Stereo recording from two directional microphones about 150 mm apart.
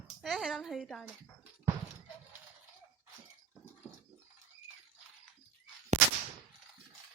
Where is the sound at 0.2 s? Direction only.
Centre (ahead or behind).